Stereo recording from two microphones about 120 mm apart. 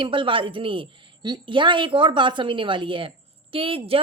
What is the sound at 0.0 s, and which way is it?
A woman's voice, 45° right (ahead or behind).